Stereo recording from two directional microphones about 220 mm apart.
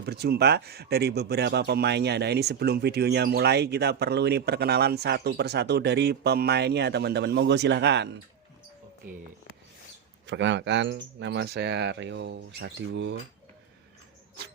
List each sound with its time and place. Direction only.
0.0 s speech: 50° right (ahead or behind)
10.2 s speech: 55° right (ahead or behind)